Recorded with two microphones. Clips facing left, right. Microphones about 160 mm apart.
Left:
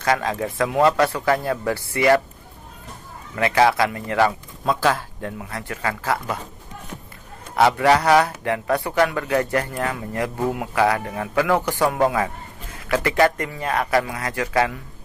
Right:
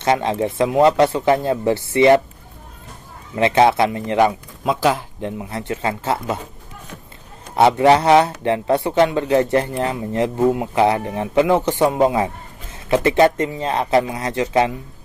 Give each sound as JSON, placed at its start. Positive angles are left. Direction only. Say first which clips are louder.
{"t": 0.0, "sound": "speech", "louder": "right 4 dB", "side_deg": -25}
{"t": 3.3, "sound": "speech", "louder": "right 3 dB", "side_deg": -25}
{"t": 7.5, "sound": "speech", "louder": "right 4 dB", "side_deg": -25}